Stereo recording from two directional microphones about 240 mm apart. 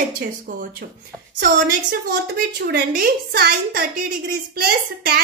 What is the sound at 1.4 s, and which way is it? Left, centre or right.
A woman's voice, right.